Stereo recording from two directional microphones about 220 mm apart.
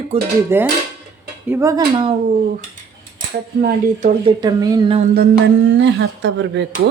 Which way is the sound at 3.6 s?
35° right (ahead or behind).